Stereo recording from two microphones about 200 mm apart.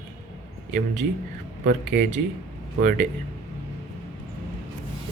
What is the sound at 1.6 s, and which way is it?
Speech, 40° right (ahead or behind).